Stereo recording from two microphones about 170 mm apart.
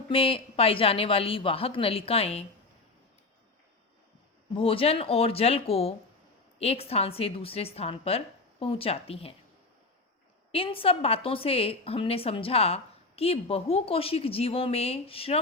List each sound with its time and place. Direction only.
0.1 s a woman's voice: 35° left (ahead or behind)
4.5 s a woman's voice: 30° left (ahead or behind)
10.5 s a woman's voice: 35° left (ahead or behind)